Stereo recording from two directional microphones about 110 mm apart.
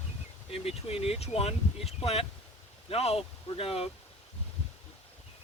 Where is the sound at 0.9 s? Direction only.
65° left (ahead or behind).